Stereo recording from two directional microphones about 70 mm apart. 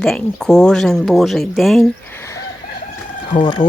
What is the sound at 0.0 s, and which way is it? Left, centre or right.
Speech, centre.